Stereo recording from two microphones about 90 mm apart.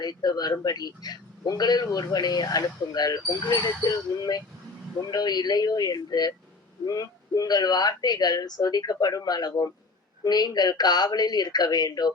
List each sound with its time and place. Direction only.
0.0 s a man's voice: 50° left (ahead or behind)